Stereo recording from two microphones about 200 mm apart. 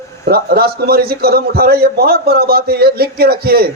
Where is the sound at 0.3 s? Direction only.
50° right (ahead or behind).